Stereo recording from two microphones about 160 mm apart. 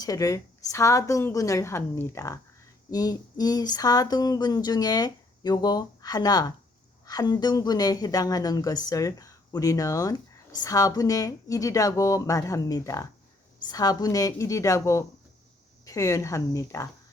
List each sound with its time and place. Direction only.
0.0 s a woman's voice: 20° left (ahead or behind)